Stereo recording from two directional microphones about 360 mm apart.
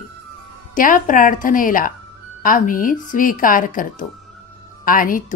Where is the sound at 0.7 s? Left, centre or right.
Left.